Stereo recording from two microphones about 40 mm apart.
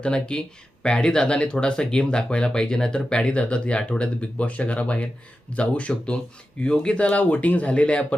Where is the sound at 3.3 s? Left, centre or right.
Left.